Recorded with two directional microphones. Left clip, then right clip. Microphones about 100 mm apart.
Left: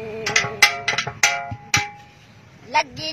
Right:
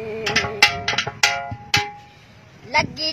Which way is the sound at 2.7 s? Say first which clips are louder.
Right 1 dB; 40° right (ahead or behind).